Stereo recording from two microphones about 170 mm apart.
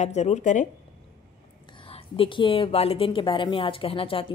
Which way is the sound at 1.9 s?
30° left (ahead or behind).